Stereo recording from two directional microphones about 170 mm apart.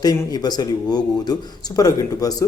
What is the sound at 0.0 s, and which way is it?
A man's voice, 25° left (ahead or behind).